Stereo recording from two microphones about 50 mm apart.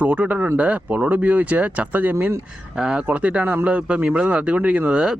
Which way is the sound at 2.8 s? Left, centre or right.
Centre.